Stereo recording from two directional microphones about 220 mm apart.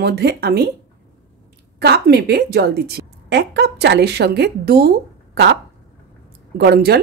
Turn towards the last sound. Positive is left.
turn(degrees=-45)  # may be behind; listen again after turning